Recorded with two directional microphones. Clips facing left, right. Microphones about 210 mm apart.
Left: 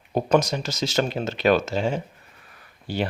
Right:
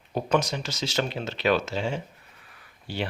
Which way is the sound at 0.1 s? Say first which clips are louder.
Left 5 dB; 40° left (ahead or behind).